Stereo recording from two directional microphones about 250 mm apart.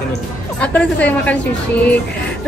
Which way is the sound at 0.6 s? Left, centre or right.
Centre.